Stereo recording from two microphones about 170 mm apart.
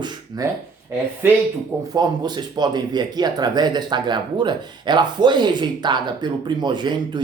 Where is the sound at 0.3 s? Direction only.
20° right (ahead or behind).